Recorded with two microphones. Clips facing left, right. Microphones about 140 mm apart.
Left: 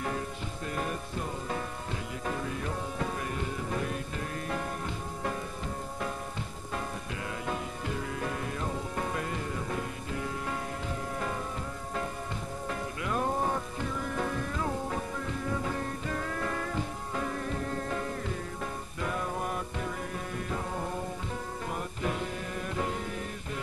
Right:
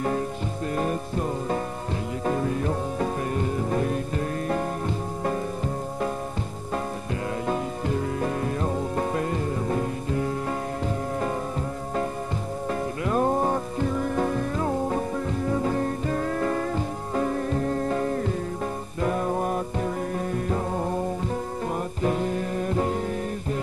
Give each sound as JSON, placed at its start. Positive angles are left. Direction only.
{"t": 0.7, "sound": "music", "side_deg": -35}
{"t": 7.4, "sound": "music", "side_deg": -35}
{"t": 13.0, "sound": "music", "side_deg": -40}
{"t": 22.0, "sound": "music", "side_deg": -40}